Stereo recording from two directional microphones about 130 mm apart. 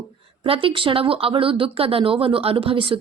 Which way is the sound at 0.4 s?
45° right (ahead or behind).